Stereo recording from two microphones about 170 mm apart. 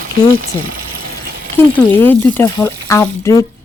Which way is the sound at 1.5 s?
10° left (ahead or behind).